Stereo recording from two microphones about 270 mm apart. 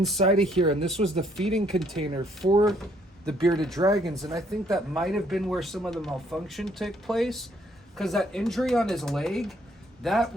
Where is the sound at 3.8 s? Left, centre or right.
Centre.